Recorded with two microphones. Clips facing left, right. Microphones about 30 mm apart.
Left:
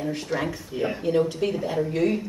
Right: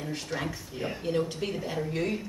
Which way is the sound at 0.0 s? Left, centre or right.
Centre.